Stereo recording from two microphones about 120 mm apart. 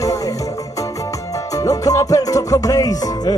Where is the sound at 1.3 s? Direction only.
30° left (ahead or behind).